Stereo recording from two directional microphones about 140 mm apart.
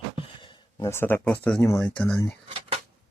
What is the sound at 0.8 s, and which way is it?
Speech, 15° left (ahead or behind).